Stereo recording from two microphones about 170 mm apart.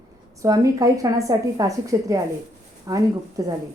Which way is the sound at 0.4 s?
20° right (ahead or behind).